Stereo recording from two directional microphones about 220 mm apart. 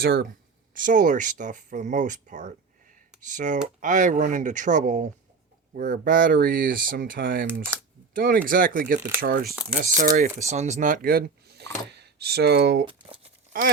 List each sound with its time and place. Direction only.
0.0 s speech: 40° right (ahead or behind)
12.8 s crumpling: 25° right (ahead or behind)